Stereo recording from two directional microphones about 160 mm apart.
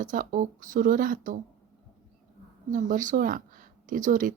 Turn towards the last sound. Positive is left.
turn(degrees=-55)  # may be behind; listen again after turning